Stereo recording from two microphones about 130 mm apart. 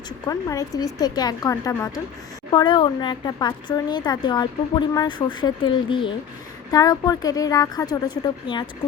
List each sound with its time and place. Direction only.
0.3 s speech: 25° left (ahead or behind)
2.5 s speech: 35° left (ahead or behind)
6.7 s speech: 30° left (ahead or behind)